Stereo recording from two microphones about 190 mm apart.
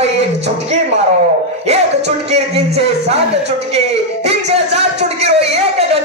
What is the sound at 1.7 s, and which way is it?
Music, 35° right (ahead or behind).